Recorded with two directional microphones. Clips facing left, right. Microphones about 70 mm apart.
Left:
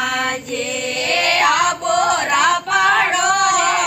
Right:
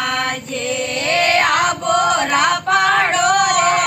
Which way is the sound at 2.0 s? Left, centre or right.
Centre.